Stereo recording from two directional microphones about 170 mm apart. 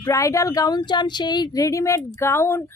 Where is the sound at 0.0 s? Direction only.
20° left (ahead or behind).